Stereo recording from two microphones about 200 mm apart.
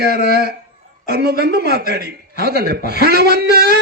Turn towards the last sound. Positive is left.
turn(degrees=-50)  # may be behind; listen again after turning